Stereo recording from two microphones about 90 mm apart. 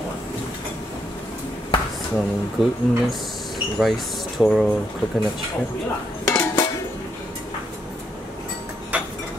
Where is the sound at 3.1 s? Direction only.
Centre (ahead or behind).